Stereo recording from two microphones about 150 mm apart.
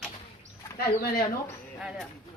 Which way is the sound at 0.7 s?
90° left.